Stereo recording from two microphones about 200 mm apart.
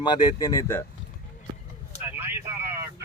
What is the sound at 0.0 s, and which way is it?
Speech, 20° left (ahead or behind).